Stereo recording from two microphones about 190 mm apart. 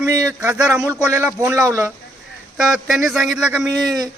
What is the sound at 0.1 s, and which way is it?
A man's voice, 15° right (ahead or behind).